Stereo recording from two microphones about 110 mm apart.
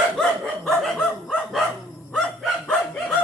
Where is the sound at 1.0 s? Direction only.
5° left (ahead or behind).